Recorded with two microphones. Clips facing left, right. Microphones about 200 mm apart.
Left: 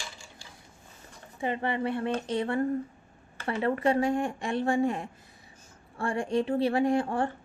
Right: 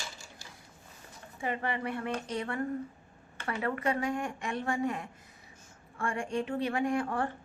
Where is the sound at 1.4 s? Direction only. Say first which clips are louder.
Left 4 dB; 25° left (ahead or behind).